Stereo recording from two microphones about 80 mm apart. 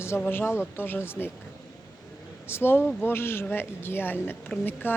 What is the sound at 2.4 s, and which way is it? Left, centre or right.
Speech, left.